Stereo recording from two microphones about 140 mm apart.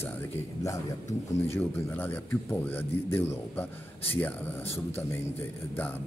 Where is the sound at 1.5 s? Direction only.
15° left (ahead or behind).